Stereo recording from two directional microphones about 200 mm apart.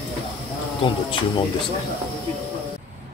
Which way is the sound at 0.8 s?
25° left (ahead or behind).